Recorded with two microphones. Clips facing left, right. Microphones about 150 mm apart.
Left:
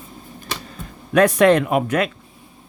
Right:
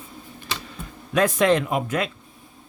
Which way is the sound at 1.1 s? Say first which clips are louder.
Left 5 dB; 65° left (ahead or behind).